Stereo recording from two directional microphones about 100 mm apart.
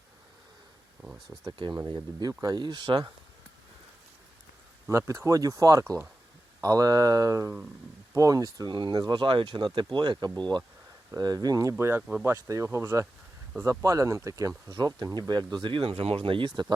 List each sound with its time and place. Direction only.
1.0 s speech: 5° right (ahead or behind)
1.6 s speech: 60° right (ahead or behind)
2.1 s speech: 40° right (ahead or behind)
4.9 s speech: 30° right (ahead or behind)
11.8 s speech: 25° right (ahead or behind); by 16.7 s 50° right (ahead or behind)